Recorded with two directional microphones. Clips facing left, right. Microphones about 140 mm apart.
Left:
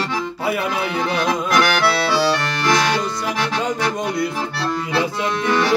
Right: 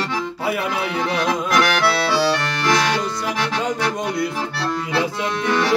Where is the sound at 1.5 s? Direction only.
15° left (ahead or behind).